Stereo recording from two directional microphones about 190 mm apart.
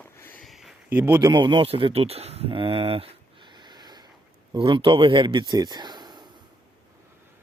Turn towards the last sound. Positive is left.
turn(degrees=-20)  # may be behind; listen again after turning